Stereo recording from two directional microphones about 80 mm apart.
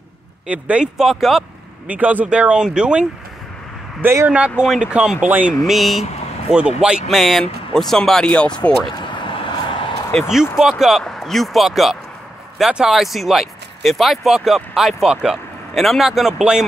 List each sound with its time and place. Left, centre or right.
0.5 s speech: centre
0.9 s speech: centre
1.9 s speech: centre
4.0 s speech: right
4.3 s speech: centre
5.5 s speech: centre
6.5 s speech: centre
8.9 s vehicle: left
10.2 s speech: centre